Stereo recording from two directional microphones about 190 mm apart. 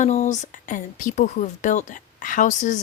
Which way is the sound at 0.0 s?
40° left (ahead or behind).